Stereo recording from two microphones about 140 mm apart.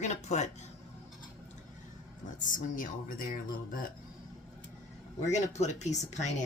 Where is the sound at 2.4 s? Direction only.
75° left (ahead or behind).